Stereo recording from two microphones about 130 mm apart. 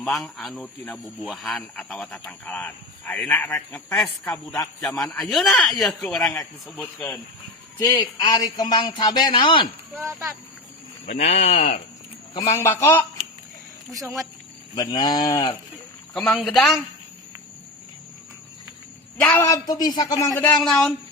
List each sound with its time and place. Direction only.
0.0 s a man's voice: centre (ahead or behind)
3.3 s speech: 15° left (ahead or behind)
4.8 s a man's voice: centre (ahead or behind)
8.0 s a man's voice: 30° left (ahead or behind)
10.1 s speech: 25° right (ahead or behind)
11.0 s speech: 55° left (ahead or behind)
12.3 s speech: 25° left (ahead or behind)
14.8 s a man's voice: 30° left (ahead or behind)
16.1 s a man's voice: centre (ahead or behind)
19.2 s speech: 20° left (ahead or behind)
20.5 s a man's voice: 5° left (ahead or behind)